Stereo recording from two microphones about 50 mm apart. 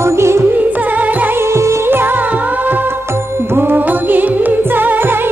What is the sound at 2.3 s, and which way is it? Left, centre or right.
Music, right.